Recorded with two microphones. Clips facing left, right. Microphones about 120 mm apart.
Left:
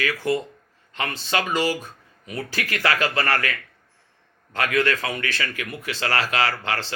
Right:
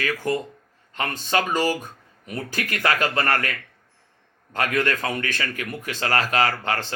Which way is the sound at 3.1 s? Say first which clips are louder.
Even; 25° right (ahead or behind).